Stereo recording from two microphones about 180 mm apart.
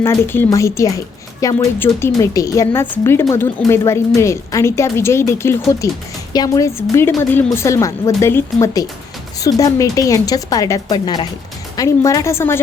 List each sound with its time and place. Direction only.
0.0 s speech: 10° left (ahead or behind)